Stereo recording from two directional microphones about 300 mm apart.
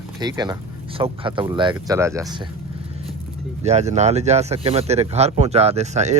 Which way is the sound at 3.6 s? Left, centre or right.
Right.